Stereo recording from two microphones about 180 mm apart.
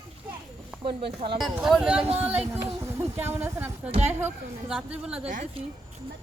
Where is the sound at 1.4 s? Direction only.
Centre (ahead or behind).